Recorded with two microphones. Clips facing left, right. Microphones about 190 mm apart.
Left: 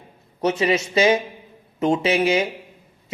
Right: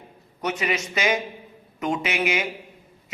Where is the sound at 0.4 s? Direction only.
30° left (ahead or behind).